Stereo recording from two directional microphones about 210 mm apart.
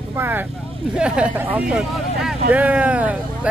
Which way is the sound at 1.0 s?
5° right (ahead or behind).